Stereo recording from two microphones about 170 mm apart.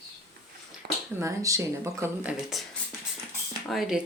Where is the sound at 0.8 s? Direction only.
70° right (ahead or behind).